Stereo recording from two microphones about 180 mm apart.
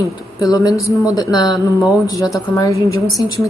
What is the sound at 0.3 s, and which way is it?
Speech, 20° left (ahead or behind).